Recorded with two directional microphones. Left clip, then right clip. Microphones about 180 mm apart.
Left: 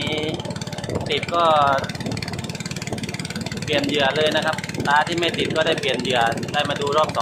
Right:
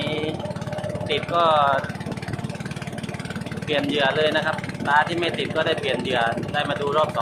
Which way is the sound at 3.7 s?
5° left (ahead or behind).